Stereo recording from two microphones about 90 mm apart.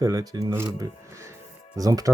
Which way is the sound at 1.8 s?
40° right (ahead or behind).